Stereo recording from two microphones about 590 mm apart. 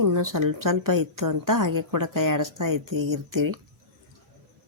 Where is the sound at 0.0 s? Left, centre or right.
Right.